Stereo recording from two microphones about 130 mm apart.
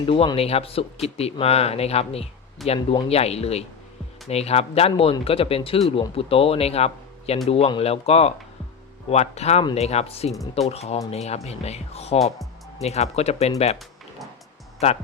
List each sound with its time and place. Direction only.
0.0 s speech: 45° left (ahead or behind)
2.6 s speech: 40° left (ahead or behind)
3.1 s speech: 50° left (ahead or behind)
14.8 s speech: 55° left (ahead or behind)